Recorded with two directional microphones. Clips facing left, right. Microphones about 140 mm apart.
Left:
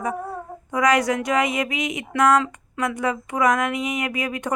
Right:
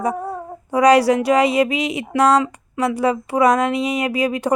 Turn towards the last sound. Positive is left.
turn(degrees=-30)  # may be behind; listen again after turning